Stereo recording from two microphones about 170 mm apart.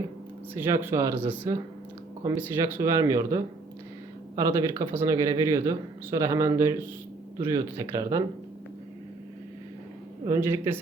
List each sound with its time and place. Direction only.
0.5 s speech: 15° right (ahead or behind)
10.2 s speech: 15° right (ahead or behind)